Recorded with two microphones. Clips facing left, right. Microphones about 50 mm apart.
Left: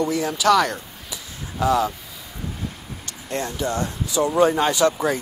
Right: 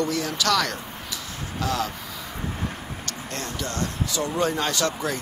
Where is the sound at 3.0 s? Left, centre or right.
Centre.